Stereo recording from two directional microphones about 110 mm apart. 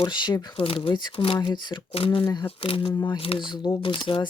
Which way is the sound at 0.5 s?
55° left (ahead or behind).